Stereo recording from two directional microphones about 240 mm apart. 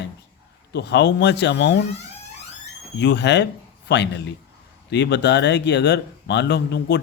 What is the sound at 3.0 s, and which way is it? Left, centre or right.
A man's voice, left.